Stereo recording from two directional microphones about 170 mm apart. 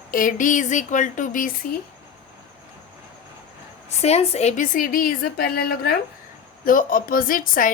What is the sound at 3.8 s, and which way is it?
A woman's voice, 40° left (ahead or behind).